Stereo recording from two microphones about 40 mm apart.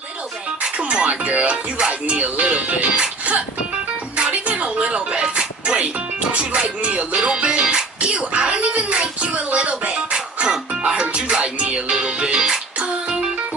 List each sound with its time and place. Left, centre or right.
0.6 s music: right
4.2 s music: right
6.6 s speech: right
9.0 s a sound: right
9.9 s music: centre